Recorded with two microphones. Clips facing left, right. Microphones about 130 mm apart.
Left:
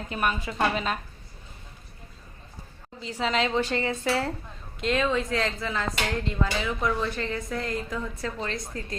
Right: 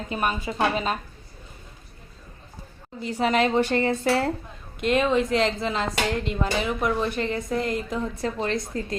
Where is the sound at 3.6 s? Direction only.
55° right (ahead or behind).